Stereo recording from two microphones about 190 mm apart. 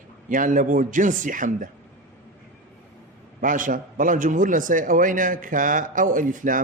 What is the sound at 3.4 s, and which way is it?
A man's voice, 45° right (ahead or behind).